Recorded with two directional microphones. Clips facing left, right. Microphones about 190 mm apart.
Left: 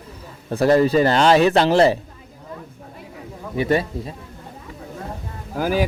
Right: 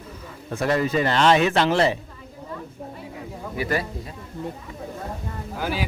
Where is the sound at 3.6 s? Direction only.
25° left (ahead or behind).